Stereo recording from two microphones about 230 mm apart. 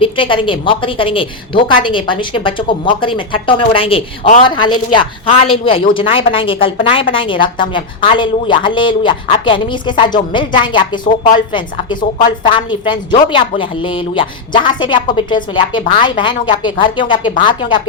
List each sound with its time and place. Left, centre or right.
0.0 s a woman's voice: left